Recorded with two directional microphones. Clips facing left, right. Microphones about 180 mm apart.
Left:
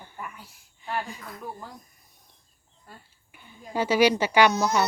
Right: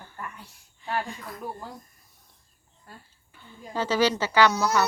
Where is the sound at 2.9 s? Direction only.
Centre (ahead or behind).